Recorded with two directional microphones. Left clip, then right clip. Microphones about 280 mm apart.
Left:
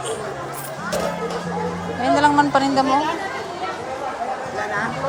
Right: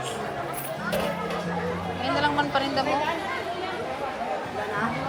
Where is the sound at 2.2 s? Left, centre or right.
Centre.